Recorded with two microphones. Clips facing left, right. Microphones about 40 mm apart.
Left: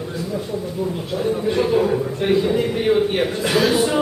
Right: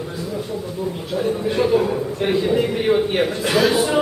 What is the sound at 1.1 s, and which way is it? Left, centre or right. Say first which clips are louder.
A man's voice: even; centre.